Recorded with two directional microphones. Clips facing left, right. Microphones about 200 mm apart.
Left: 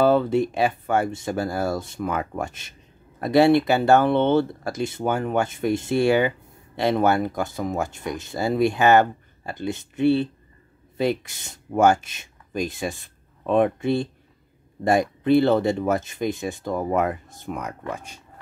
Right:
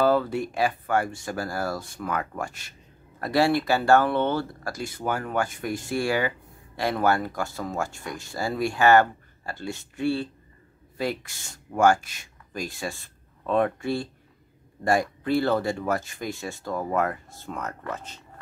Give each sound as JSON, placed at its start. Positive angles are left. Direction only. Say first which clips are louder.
{"t": 0.0, "sound": "speech", "louder": "left 4 dB", "side_deg": 25}